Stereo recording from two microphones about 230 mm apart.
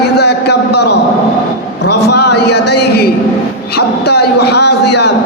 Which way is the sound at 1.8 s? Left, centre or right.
Left.